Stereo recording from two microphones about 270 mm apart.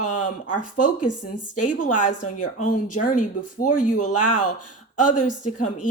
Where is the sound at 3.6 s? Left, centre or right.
Left.